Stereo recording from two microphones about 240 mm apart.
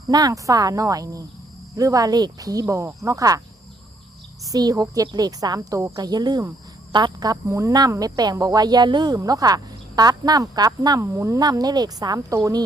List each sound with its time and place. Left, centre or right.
0.1 s speech: centre
4.4 s speech: centre